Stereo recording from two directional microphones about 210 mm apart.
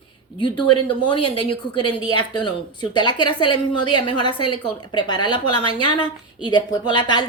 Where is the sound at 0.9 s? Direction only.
25° left (ahead or behind).